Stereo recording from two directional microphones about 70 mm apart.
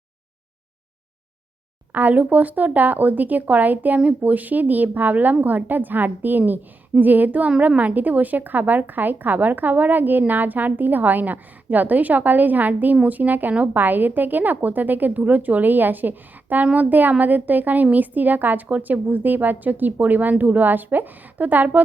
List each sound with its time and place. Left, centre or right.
1.9 s speech: right